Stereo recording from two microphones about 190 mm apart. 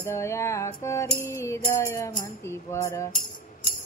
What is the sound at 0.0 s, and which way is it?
Music, 15° left (ahead or behind).